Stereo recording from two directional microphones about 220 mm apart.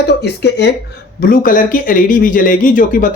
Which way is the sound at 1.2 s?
40° left (ahead or behind).